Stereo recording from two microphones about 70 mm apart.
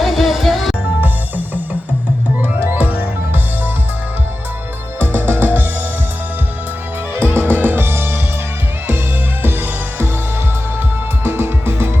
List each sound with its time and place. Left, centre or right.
0.0 s music: centre
2.4 s music: right
4.9 s music: right
7.3 s music: right
9.4 s music: right
11.2 s music: right